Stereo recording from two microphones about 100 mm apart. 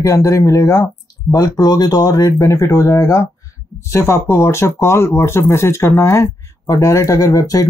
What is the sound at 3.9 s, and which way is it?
Speech, 25° left (ahead or behind).